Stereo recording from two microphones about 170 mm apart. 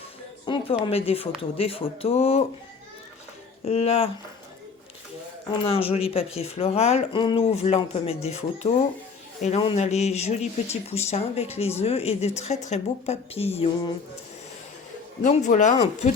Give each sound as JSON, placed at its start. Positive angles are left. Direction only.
{"t": 0.4, "sound": "a sound", "side_deg": 30}
{"t": 0.9, "sound": "speech", "side_deg": 35}
{"t": 3.7, "sound": "speech", "side_deg": 35}
{"t": 5.5, "sound": "speech", "side_deg": 35}
{"t": 15.2, "sound": "speech", "side_deg": 45}